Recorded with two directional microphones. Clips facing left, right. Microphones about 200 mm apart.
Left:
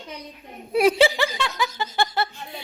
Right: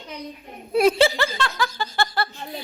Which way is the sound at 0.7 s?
10° left (ahead or behind).